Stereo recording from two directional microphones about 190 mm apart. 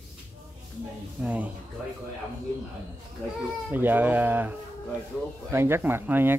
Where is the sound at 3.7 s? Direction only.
10° right (ahead or behind).